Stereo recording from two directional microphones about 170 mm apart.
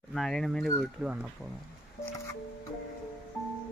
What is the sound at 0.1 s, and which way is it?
Speech, centre (ahead or behind).